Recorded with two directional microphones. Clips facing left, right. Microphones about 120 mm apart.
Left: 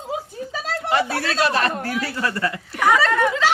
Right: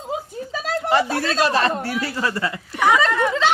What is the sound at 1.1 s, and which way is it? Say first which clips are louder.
Speech: right 1 dB; 30° right (ahead or behind).